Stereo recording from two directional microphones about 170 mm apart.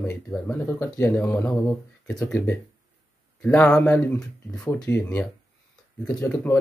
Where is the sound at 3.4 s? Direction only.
10° left (ahead or behind).